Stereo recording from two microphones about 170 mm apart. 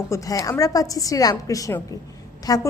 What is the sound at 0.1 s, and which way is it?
Speech, 20° left (ahead or behind).